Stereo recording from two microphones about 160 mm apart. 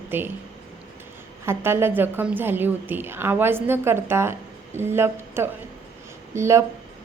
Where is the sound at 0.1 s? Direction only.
15° right (ahead or behind).